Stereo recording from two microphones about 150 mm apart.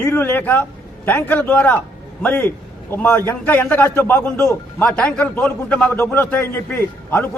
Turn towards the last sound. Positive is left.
turn(degrees=15)  # may be behind; listen again after turning